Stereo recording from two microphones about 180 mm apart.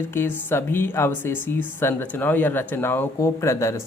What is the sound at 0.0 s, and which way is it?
A woman's voice, 10° left (ahead or behind).